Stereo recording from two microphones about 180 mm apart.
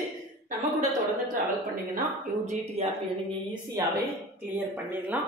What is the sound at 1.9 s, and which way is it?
Speech, 40° right (ahead or behind).